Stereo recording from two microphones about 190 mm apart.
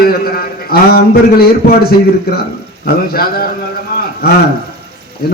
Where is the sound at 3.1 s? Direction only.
50° left (ahead or behind).